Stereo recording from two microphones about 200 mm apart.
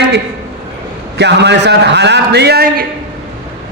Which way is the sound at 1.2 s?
60° right (ahead or behind).